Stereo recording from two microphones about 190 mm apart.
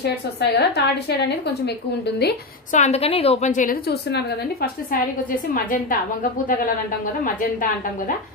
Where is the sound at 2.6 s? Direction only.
40° left (ahead or behind).